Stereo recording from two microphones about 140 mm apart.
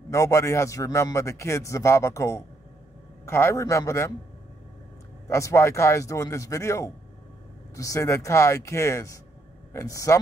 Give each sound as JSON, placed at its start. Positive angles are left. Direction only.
{"t": 0.1, "sound": "a man's voice", "side_deg": 20}
{"t": 5.3, "sound": "a man's voice", "side_deg": 20}